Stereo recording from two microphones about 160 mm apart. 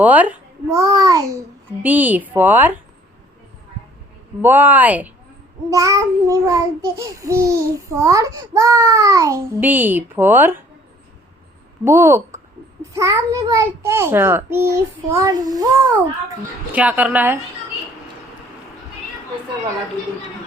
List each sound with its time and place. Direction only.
0.0 s child singing: 10° right (ahead or behind)
1.8 s a child's voice: 10° right (ahead or behind)
4.4 s a child's voice: 10° right (ahead or behind)
5.7 s child singing: 20° right (ahead or behind)
11.9 s a child's voice: 15° right (ahead or behind)
16.7 s a child's voice: 10° right (ahead or behind)